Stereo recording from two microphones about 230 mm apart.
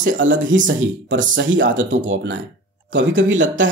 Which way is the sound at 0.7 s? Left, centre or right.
Right.